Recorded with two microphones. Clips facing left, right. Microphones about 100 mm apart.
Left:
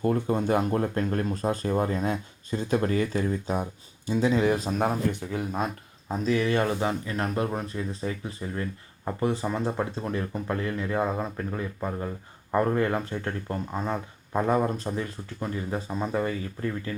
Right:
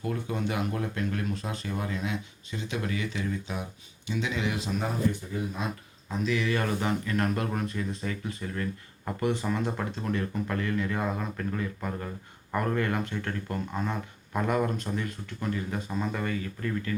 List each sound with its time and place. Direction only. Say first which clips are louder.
0.0 s speech: left 6 dB; 40° left (ahead or behind)
6.1 s speech: left 3 dB; 35° left (ahead or behind)